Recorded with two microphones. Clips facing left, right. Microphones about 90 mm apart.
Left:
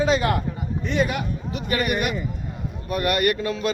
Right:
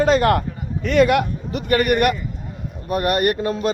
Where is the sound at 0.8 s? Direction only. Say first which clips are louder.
Right 9 dB; 75° right (ahead or behind).